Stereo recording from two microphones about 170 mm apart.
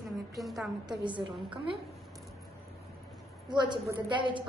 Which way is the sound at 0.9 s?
30° right (ahead or behind).